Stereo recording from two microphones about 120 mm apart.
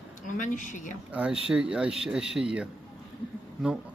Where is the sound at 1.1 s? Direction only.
10° right (ahead or behind).